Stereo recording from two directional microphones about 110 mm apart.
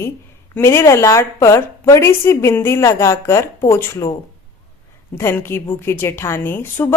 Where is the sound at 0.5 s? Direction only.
20° left (ahead or behind).